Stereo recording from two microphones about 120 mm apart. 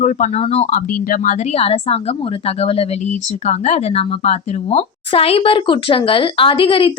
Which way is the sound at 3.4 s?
70° left (ahead or behind).